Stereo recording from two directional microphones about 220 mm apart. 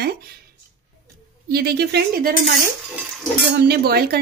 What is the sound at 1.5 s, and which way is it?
Speech, 45° right (ahead or behind).